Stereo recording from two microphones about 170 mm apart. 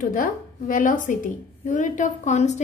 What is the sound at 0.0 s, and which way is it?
A woman's voice, 55° left (ahead or behind).